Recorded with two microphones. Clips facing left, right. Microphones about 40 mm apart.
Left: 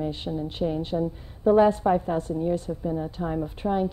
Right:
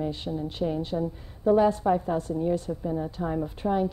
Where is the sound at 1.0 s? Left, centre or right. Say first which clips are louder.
Left 2 dB; left.